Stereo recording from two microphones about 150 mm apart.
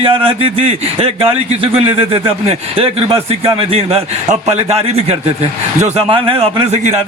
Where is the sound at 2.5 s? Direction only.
40° right (ahead or behind).